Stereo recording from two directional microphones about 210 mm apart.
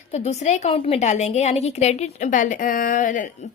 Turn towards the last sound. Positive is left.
turn(degrees=40)  # may be behind; listen again after turning